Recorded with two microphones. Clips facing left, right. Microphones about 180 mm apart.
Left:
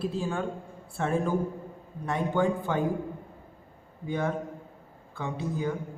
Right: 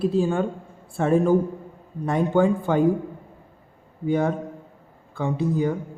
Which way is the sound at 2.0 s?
50° right (ahead or behind).